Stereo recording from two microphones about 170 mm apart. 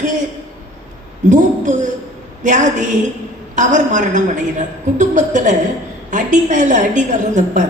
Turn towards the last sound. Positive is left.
turn(degrees=-45)  # may be behind; listen again after turning